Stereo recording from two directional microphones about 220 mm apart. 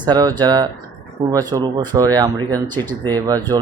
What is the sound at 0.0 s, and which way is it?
Speech, 20° right (ahead or behind).